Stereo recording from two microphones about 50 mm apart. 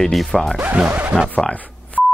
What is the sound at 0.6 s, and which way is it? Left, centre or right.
Speech, right.